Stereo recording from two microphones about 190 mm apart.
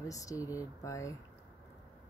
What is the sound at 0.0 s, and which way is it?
Speech, 15° left (ahead or behind).